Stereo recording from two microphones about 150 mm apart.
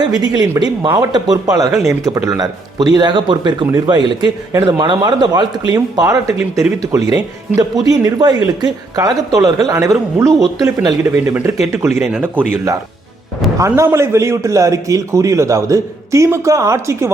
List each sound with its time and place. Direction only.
0.0 s a man's voice: 25° right (ahead or behind); by 12.5 s 10° right (ahead or behind)
13.6 s a man's voice: 20° right (ahead or behind)